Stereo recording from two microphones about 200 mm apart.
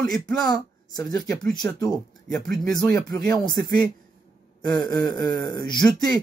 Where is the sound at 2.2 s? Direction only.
5° left (ahead or behind).